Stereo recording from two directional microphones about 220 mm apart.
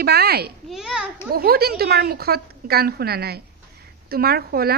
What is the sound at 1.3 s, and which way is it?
Speech, 45° right (ahead or behind).